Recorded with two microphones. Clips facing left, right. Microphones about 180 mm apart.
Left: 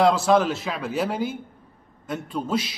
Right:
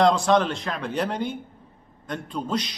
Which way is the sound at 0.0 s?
5° left (ahead or behind).